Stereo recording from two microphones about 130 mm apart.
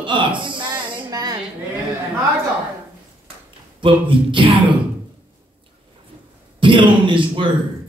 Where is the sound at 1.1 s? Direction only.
30° right (ahead or behind).